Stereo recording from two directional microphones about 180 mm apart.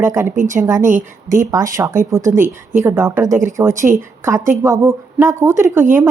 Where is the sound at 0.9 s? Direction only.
45° right (ahead or behind).